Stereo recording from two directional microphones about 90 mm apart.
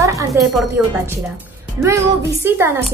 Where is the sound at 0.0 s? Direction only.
35° right (ahead or behind).